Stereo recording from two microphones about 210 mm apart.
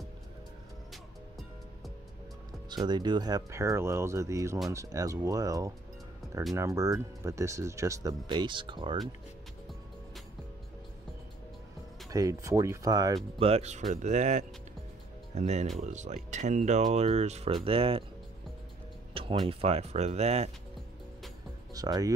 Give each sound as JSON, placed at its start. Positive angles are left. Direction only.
{"t": 2.7, "sound": "speech", "side_deg": -20}
{"t": 12.1, "sound": "speech", "side_deg": -15}
{"t": 13.5, "sound": "speech", "side_deg": -30}
{"t": 19.4, "sound": "speech", "side_deg": -30}
{"t": 21.7, "sound": "speech", "side_deg": -15}